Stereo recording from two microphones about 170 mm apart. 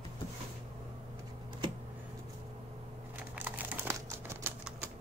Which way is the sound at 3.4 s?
10° right (ahead or behind).